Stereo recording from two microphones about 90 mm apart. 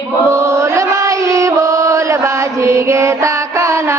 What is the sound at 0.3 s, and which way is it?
Chant, 30° right (ahead or behind).